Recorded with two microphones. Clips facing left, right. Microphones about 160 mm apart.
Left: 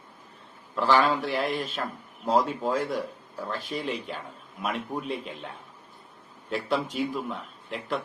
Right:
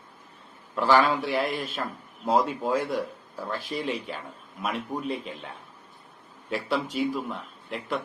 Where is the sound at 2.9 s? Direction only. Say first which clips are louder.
Right 1 dB; 5° right (ahead or behind).